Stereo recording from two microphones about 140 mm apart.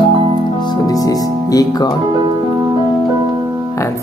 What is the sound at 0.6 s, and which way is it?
Speech, 30° left (ahead or behind).